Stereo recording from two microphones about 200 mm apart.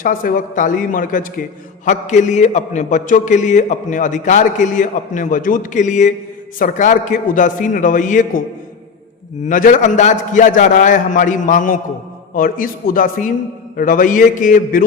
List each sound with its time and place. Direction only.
0.0 s a man's voice: 45° left (ahead or behind)
9.5 s a man's voice: 40° left (ahead or behind)